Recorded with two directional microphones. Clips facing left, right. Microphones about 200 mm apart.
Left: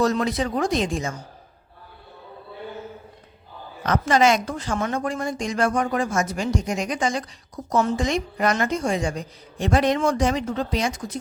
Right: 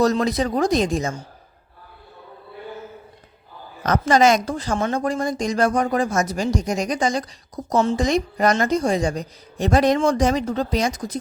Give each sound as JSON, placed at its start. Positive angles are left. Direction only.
{"t": 0.0, "sound": "a woman's voice", "side_deg": -35}
{"t": 3.8, "sound": "a woman's voice", "side_deg": -40}